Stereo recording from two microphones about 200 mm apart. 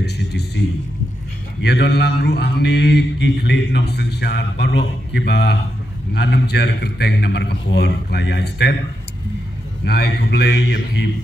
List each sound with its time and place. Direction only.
0.0 s a sound: 55° left (ahead or behind)
1.6 s a man's voice: 55° left (ahead or behind)
9.8 s a man's voice: 55° left (ahead or behind)